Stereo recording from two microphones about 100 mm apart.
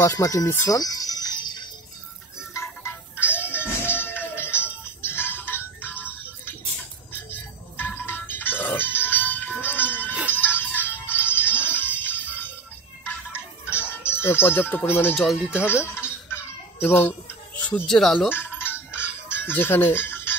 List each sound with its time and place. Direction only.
0.0 s music: 30° left (ahead or behind); by 1.7 s 45° left (ahead or behind)
2.5 s music: 25° left (ahead or behind)
13.7 s music: 20° left (ahead or behind)
15.1 s speech: centre (ahead or behind)
15.8 s a sound: 20° left (ahead or behind)
16.8 s speech: 20° left (ahead or behind)
17.6 s music: 15° left (ahead or behind)
17.8 s speech: 5° left (ahead or behind)
18.3 s music: 20° left (ahead or behind)